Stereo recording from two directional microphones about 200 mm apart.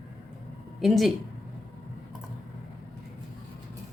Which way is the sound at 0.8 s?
Centre (ahead or behind).